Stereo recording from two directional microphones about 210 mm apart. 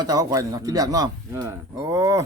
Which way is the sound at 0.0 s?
20° right (ahead or behind).